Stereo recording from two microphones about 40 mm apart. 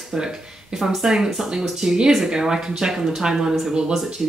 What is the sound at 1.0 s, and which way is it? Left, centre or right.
Speech, centre.